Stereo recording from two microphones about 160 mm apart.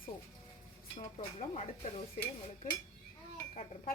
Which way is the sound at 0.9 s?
50° left (ahead or behind).